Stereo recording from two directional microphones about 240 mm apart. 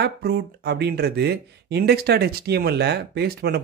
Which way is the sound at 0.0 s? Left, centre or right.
Right.